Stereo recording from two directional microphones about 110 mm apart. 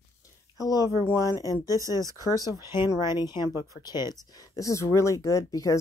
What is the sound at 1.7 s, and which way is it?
Speech, 30° right (ahead or behind).